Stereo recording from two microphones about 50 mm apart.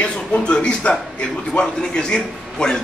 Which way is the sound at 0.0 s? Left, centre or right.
Left.